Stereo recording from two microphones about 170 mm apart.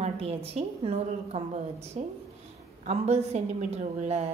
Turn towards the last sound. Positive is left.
turn(degrees=-40)  # may be behind; listen again after turning